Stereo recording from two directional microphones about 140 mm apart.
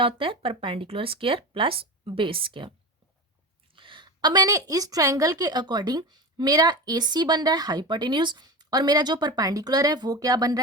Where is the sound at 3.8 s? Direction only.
35° right (ahead or behind).